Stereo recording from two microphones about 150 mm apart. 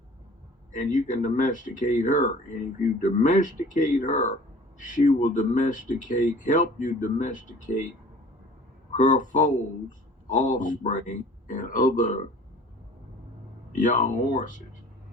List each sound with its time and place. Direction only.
0.7 s speech: 55° left (ahead or behind)
8.9 s speech: 55° left (ahead or behind)
13.7 s speech: 60° left (ahead or behind)